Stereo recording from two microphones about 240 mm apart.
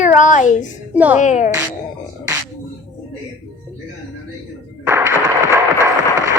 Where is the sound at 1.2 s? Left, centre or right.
Left.